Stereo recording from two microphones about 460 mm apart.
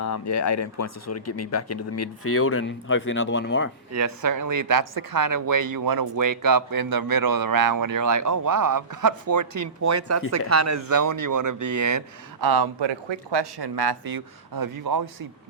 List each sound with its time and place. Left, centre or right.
0.0 s speech: left
3.9 s speech: right